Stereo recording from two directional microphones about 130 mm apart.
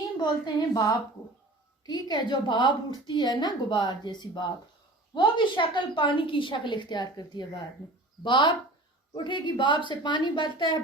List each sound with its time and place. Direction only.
0.2 s a woman's voice: 35° left (ahead or behind)